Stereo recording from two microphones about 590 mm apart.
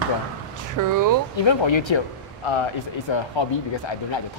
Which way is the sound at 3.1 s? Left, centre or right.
Left.